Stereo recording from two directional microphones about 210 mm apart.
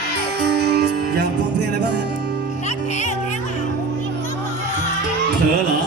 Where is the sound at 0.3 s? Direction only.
50° right (ahead or behind).